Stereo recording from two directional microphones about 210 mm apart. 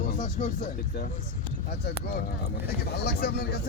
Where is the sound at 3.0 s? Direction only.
50° left (ahead or behind).